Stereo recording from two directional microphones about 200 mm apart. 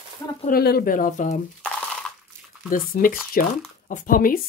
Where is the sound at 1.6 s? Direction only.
5° left (ahead or behind).